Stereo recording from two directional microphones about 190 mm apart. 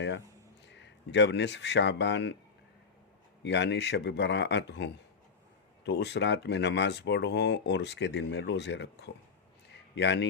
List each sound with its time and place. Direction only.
0.7 s speech: 65° left (ahead or behind)
3.4 s speech: 65° left (ahead or behind)
9.6 s a sound: 65° left (ahead or behind)